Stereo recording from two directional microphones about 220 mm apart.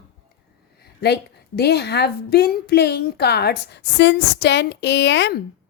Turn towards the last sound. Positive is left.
turn(degrees=50)  # may be behind; listen again after turning